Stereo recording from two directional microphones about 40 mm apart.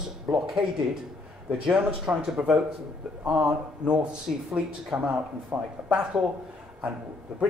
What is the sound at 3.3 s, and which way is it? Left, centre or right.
Speech, right.